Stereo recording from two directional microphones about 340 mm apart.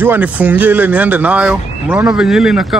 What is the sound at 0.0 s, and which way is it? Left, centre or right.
Speech, centre.